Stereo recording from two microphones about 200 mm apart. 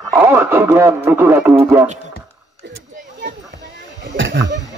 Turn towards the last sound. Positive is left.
turn(degrees=-70)  # may be behind; listen again after turning